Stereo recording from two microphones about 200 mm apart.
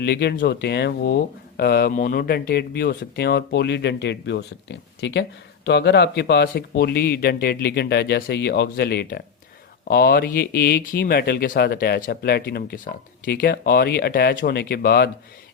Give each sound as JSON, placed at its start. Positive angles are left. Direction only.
{"t": 0.0, "sound": "speech", "side_deg": 55}